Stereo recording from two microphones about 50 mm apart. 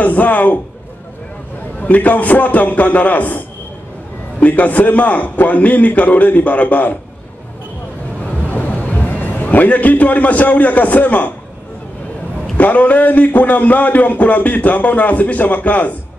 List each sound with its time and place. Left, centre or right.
0.0 s a man's voice: left
1.8 s a man's voice: left
8.2 s a sound: left
12.5 s a man's voice: left